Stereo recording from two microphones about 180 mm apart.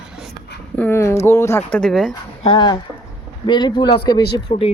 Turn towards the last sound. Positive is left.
turn(degrees=30)  # may be behind; listen again after turning